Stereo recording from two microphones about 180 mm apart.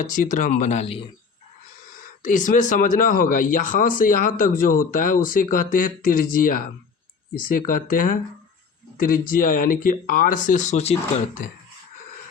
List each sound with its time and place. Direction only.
0.0 s speech: 45° left (ahead or behind)
2.0 s speech: 45° left (ahead or behind)